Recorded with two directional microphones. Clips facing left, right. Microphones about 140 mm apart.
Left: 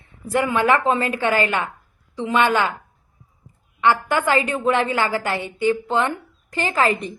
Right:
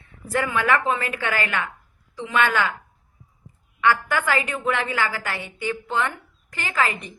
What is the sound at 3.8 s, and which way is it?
A woman's voice, 25° left (ahead or behind).